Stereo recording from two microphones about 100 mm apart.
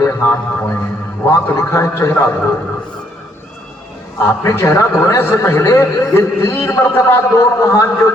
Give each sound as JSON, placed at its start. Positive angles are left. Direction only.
{"t": 0.0, "sound": "a sound", "side_deg": 30}
{"t": 0.5, "sound": "a man's voice", "side_deg": 20}
{"t": 1.3, "sound": "a man's voice", "side_deg": 30}
{"t": 4.2, "sound": "a man's voice", "side_deg": 30}